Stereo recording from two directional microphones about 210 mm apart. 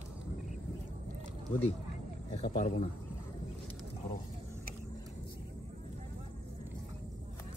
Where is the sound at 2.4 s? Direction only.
35° left (ahead or behind).